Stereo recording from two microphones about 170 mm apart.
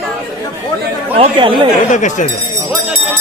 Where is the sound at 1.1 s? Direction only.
30° right (ahead or behind).